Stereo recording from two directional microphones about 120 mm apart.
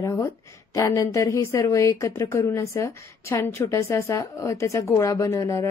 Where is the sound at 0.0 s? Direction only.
20° left (ahead or behind).